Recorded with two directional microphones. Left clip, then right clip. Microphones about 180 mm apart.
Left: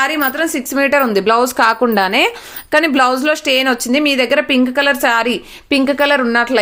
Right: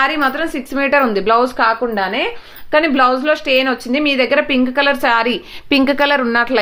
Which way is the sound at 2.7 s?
30° left (ahead or behind).